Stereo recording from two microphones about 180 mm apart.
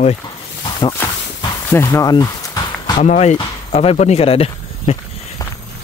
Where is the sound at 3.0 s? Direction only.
40° left (ahead or behind).